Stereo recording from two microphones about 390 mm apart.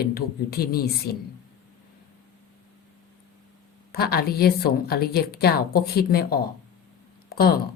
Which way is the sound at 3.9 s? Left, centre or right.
Left.